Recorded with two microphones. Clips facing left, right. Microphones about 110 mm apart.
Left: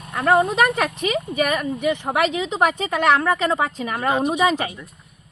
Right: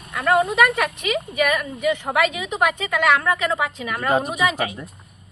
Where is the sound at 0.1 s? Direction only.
30° left (ahead or behind).